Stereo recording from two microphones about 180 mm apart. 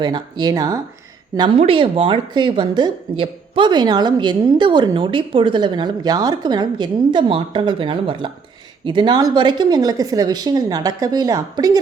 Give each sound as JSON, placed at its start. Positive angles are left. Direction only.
{"t": 0.0, "sound": "a woman's voice", "side_deg": -25}